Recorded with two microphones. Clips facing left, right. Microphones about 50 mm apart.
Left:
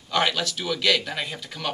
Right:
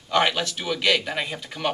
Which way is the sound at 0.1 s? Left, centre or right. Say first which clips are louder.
Right 2 dB; centre.